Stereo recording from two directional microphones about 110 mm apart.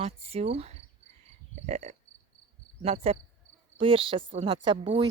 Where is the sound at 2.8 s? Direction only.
70° right (ahead or behind).